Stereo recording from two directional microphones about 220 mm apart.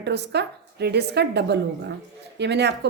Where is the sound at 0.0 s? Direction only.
50° right (ahead or behind).